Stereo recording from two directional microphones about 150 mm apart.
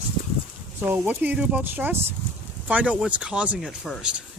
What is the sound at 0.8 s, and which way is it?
Speech, 15° right (ahead or behind).